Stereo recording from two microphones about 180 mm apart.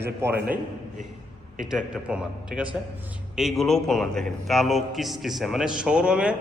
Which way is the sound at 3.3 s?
Centre (ahead or behind).